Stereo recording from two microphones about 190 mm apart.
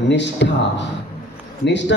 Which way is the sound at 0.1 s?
70° left (ahead or behind).